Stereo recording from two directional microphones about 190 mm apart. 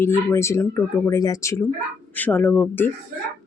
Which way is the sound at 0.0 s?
15° left (ahead or behind).